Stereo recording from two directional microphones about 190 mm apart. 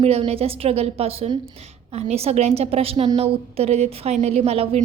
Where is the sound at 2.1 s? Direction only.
35° right (ahead or behind).